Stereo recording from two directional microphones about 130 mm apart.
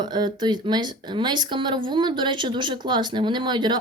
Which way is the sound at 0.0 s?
35° right (ahead or behind).